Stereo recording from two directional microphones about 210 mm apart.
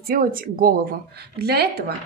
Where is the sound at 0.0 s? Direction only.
45° right (ahead or behind).